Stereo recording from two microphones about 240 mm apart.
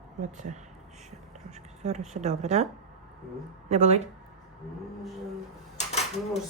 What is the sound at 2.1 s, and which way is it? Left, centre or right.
Speech, right.